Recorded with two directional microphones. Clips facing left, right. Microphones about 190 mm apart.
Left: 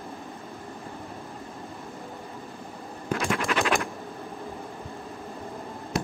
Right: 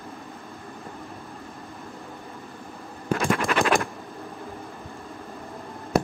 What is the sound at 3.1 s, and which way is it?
Scratch, 50° right (ahead or behind).